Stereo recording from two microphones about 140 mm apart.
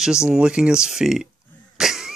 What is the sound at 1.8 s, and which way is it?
Cough, 5° right (ahead or behind).